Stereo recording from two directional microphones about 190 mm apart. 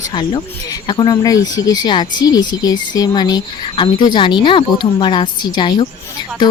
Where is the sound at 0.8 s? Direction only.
20° left (ahead or behind).